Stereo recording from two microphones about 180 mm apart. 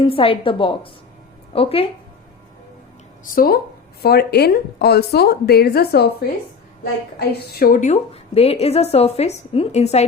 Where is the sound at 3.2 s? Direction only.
55° left (ahead or behind); by 10.1 s 35° left (ahead or behind).